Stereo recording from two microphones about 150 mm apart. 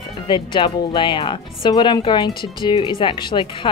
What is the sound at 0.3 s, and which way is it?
Speech, 30° left (ahead or behind).